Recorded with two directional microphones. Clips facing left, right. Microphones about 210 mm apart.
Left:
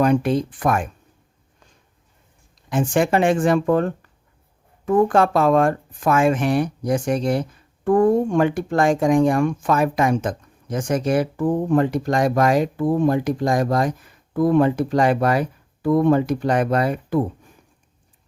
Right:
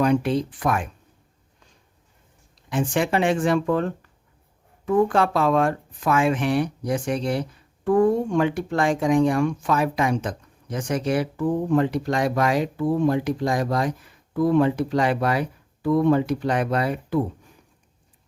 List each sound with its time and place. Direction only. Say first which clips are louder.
0.0 s speech: left 2 dB; 50° left (ahead or behind)
2.6 s speech: left 4 dB; 45° left (ahead or behind)